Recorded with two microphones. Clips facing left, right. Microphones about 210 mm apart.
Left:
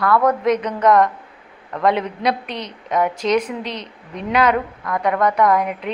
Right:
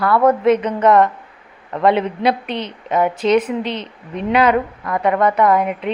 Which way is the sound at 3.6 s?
30° right (ahead or behind).